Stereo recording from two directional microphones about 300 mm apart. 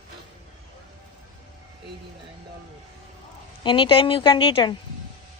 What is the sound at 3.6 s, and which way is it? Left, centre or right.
A woman's voice, centre.